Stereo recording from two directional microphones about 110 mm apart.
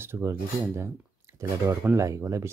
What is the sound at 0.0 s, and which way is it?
Speech, 20° right (ahead or behind).